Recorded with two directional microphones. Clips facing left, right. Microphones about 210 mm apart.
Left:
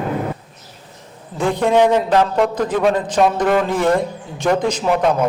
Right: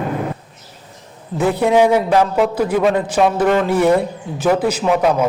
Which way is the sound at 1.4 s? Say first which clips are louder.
Right 1 dB; 5° right (ahead or behind).